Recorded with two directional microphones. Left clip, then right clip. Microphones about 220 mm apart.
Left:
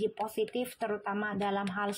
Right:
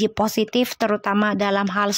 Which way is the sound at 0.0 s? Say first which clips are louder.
Right 11 dB; 45° right (ahead or behind).